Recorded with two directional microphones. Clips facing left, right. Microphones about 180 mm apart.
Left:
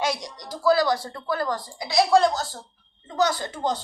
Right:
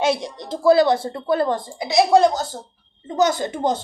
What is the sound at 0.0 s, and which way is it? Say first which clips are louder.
A woman's voice: right 6 dB; 25° right (ahead or behind).